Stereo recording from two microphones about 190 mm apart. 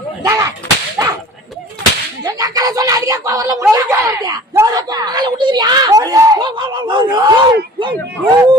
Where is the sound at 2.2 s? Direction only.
20° right (ahead or behind).